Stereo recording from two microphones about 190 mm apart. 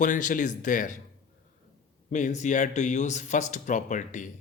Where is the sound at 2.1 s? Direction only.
40° left (ahead or behind).